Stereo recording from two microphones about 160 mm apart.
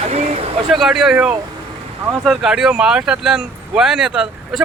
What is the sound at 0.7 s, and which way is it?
Speech, 5° right (ahead or behind).